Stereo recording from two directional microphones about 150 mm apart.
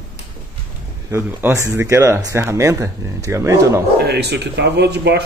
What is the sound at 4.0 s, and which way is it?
Speech, 90° right.